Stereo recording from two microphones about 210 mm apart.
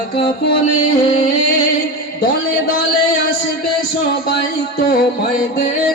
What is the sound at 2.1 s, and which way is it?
Music, 45° left (ahead or behind).